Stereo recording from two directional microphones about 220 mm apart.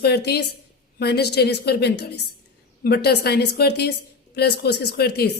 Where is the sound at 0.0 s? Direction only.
45° left (ahead or behind).